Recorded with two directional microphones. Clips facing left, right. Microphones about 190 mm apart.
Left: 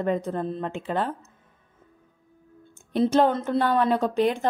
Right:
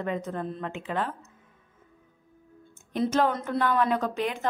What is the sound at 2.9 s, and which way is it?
Speech, 30° left (ahead or behind).